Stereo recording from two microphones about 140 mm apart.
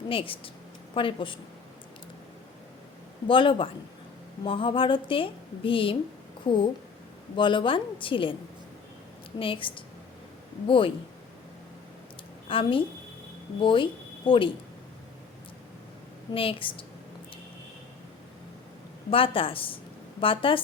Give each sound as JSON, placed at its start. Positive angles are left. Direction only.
{"t": 0.1, "sound": "a woman's voice", "side_deg": 40}
{"t": 3.2, "sound": "a woman's voice", "side_deg": 35}
{"t": 9.4, "sound": "a woman's voice", "side_deg": 40}
{"t": 12.5, "sound": "a woman's voice", "side_deg": 40}
{"t": 16.3, "sound": "a woman's voice", "side_deg": 40}
{"t": 19.1, "sound": "a woman's voice", "side_deg": 40}